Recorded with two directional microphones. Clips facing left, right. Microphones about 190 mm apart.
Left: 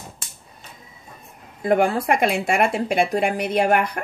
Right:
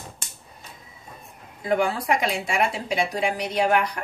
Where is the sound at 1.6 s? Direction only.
55° left (ahead or behind).